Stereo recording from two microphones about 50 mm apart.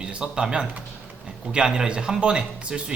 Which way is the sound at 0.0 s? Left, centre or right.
Centre.